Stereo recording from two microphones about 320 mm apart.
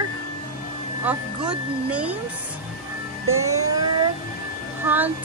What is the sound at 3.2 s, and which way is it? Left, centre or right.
Music, right.